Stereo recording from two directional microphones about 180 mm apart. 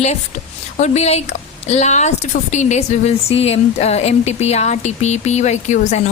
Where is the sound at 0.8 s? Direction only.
35° left (ahead or behind).